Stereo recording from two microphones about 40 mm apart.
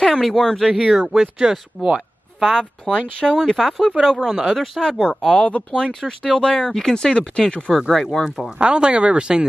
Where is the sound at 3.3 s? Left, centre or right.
Centre.